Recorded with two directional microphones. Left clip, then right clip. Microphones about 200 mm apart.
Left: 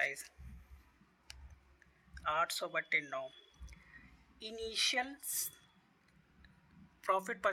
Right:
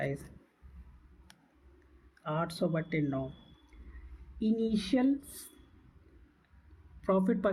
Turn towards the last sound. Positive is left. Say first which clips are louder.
# right 4 dB
turn(degrees=25)  # may be behind; listen again after turning